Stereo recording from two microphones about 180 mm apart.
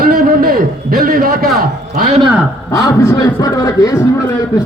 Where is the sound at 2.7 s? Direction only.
15° left (ahead or behind).